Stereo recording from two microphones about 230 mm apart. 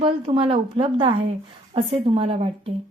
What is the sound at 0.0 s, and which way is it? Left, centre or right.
A woman's voice, right.